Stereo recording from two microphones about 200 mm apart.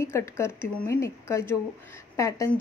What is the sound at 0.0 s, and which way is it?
A woman's voice, 15° left (ahead or behind).